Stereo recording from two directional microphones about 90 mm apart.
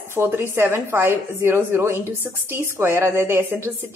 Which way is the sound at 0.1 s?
25° right (ahead or behind).